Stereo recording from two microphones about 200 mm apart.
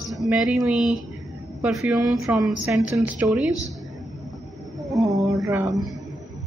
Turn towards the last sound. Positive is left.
turn(degrees=-15)  # may be behind; listen again after turning